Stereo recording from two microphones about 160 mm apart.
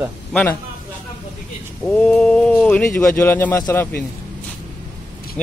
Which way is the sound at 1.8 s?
5° left (ahead or behind).